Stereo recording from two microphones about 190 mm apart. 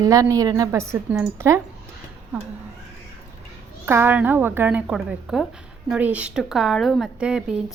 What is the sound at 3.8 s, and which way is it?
A woman's voice, 10° right (ahead or behind).